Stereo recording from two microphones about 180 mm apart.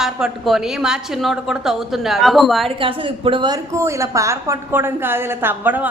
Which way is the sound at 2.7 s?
30° right (ahead or behind).